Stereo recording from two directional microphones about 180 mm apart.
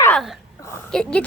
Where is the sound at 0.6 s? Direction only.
15° left (ahead or behind).